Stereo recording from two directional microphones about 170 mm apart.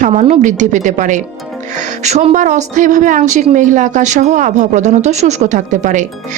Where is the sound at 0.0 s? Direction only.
40° right (ahead or behind).